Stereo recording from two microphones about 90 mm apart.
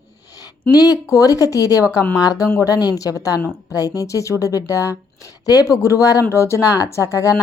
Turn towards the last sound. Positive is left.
turn(degrees=40)  # may be behind; listen again after turning